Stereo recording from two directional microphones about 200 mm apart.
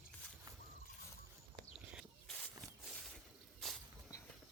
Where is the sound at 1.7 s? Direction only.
5° right (ahead or behind).